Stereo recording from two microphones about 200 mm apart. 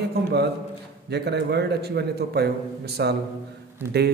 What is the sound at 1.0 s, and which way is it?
A man's voice, 55° right (ahead or behind).